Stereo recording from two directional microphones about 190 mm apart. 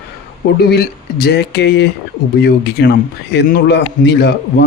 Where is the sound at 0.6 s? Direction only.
55° left (ahead or behind).